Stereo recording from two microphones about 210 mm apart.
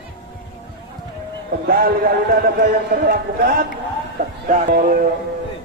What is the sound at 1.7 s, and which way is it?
Speech, 45° right (ahead or behind).